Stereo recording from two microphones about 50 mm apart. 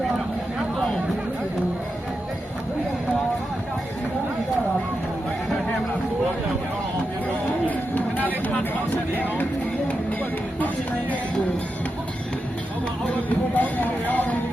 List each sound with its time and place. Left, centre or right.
9.1 s music: left
13.6 s music: left